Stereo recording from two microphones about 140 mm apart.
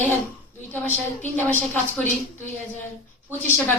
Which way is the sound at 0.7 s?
15° left (ahead or behind).